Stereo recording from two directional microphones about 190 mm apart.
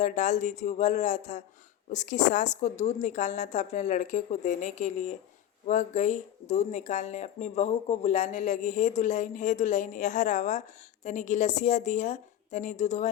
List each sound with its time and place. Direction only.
0.0 s speech: 40° left (ahead or behind)